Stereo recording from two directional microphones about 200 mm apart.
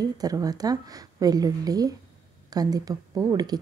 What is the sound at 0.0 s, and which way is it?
A woman's voice, 20° right (ahead or behind).